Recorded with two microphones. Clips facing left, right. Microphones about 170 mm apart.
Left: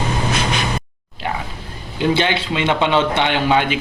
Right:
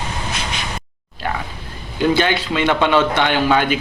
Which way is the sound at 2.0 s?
25° left (ahead or behind).